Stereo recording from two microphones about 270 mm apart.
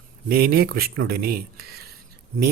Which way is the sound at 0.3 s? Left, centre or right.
Right.